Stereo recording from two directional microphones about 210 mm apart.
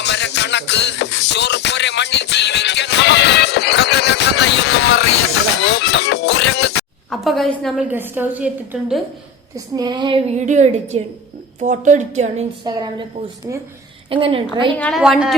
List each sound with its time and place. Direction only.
0.0 s music: 55° left (ahead or behind)
7.1 s a woman's voice: centre (ahead or behind)
9.7 s a woman's voice: 20° right (ahead or behind)
12.6 s speech: 20° right (ahead or behind)
14.1 s speech: 25° right (ahead or behind)
14.8 s a woman's voice: centre (ahead or behind)